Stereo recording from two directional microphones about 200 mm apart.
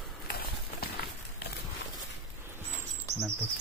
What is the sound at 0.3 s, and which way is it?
Horse, 50° left (ahead or behind).